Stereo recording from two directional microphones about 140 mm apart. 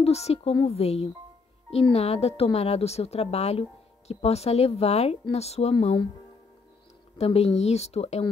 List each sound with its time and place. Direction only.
0.0 s a woman's voice: 50° left (ahead or behind)
7.2 s speech: 50° left (ahead or behind)